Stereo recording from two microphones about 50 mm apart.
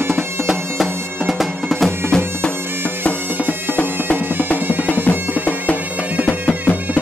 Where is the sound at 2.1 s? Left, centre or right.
Centre.